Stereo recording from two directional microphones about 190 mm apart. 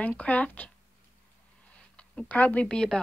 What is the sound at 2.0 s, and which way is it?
Speech, 5° left (ahead or behind).